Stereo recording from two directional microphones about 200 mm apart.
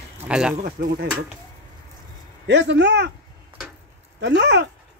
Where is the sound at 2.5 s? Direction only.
60° right (ahead or behind).